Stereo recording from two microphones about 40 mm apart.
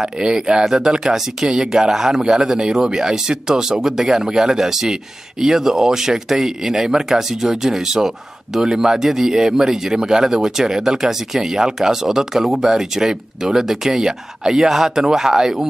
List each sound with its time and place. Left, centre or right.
0.2 s speech: centre